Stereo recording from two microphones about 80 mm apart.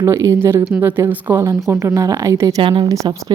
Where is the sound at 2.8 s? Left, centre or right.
Right.